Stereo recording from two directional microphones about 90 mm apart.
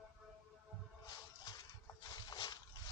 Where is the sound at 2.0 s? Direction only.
50° left (ahead or behind).